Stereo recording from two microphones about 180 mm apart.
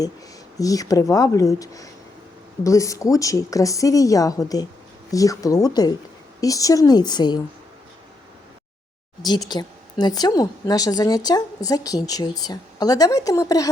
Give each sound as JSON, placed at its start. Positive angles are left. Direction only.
{"t": 0.6, "sound": "a woman's voice", "side_deg": 20}
{"t": 9.5, "sound": "a woman's voice", "side_deg": 25}